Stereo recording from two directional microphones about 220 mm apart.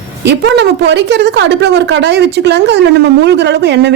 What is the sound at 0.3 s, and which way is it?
A woman's voice, 50° right (ahead or behind).